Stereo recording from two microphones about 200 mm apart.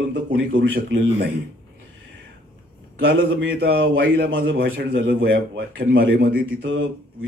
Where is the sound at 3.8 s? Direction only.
65° right (ahead or behind).